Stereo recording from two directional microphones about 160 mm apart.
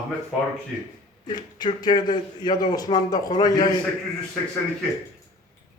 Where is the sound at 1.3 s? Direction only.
25° left (ahead or behind).